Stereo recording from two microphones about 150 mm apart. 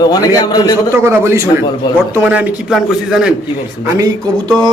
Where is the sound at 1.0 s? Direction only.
15° right (ahead or behind).